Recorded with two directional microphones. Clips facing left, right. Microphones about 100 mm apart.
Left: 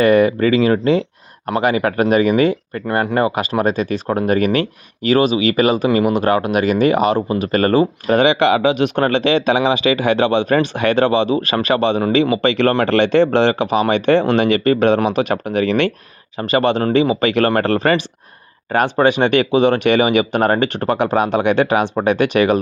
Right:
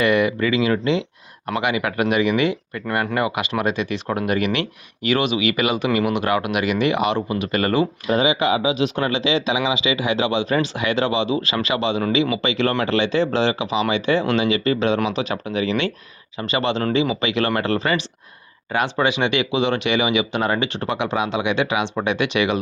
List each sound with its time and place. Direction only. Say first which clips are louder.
0.0 s speech: left 6 dB; 40° left (ahead or behind)
8.1 s speech: left 6 dB; 65° left (ahead or behind); by 22.5 s 45° left (ahead or behind)